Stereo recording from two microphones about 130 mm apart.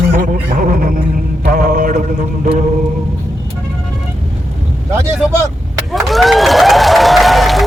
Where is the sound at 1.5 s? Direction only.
90° right.